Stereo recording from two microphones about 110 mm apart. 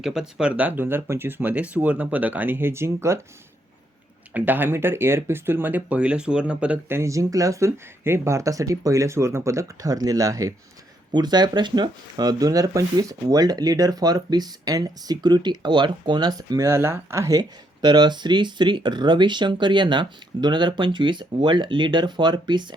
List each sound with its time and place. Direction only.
0.0 s speech: 5° right (ahead or behind); by 3.2 s 25° right (ahead or behind)
4.4 s speech: 15° right (ahead or behind)
11.1 s speech: 40° right (ahead or behind)
16.6 s speech: 20° right (ahead or behind); by 22.6 s 40° right (ahead or behind)